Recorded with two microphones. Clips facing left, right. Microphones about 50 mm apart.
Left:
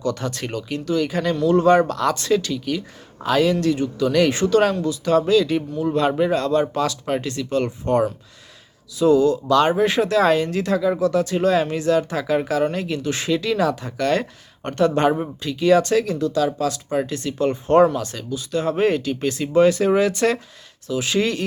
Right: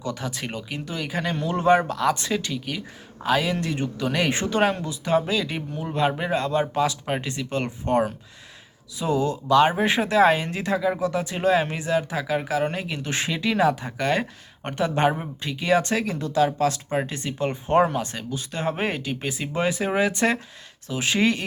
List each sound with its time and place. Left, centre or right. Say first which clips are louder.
0.0 s speech: left 5 dB; centre
2.1 s speech: left 6 dB; right
3.6 s speech: left 7 dB; right
13.0 s speech: left 5 dB; right
20.8 s speech: left 1 dB; right